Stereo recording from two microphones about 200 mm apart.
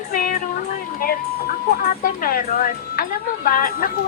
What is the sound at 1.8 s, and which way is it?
Speech, 45° left (ahead or behind).